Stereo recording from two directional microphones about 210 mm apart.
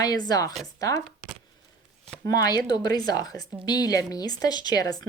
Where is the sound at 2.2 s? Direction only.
20° left (ahead or behind).